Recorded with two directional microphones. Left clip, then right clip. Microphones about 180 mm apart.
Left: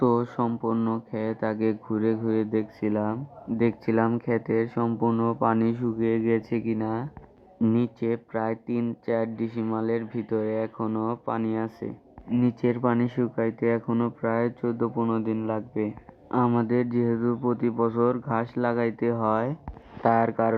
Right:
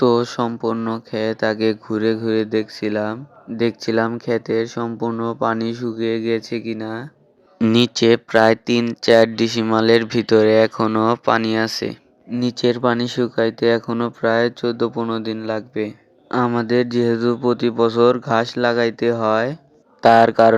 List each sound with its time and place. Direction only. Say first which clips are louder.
0.0 s speech: right 7 dB; 45° right (ahead or behind)
2.7 s speech: right 6 dB; 25° right (ahead or behind)
3.6 s speech: right 6 dB; 35° right (ahead or behind)
6.4 s speech: right 3 dB; 25° right (ahead or behind)
7.7 s speech: right 13 dB; 40° right (ahead or behind)
15.4 s speech: right 6 dB; 25° right (ahead or behind)
16.6 s speech: right 7 dB; 35° right (ahead or behind)